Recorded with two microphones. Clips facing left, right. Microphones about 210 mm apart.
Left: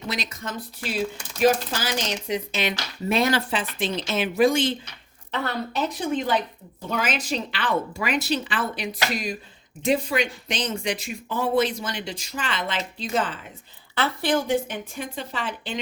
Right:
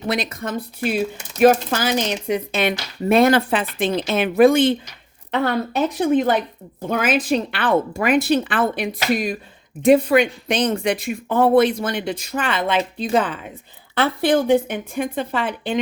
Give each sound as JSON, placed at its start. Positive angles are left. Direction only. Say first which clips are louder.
{"t": 0.1, "sound": "a woman's voice", "louder": "right 8 dB", "side_deg": -55}